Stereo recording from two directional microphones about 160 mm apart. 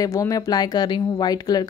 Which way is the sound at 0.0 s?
20° left (ahead or behind).